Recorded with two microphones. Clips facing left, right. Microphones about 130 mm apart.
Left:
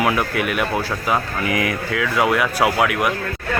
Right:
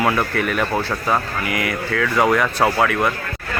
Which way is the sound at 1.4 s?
25° left (ahead or behind).